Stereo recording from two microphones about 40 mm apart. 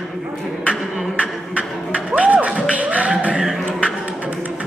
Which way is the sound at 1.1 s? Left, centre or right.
Right.